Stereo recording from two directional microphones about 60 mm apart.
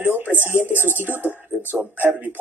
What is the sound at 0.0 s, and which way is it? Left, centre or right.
Speech, right.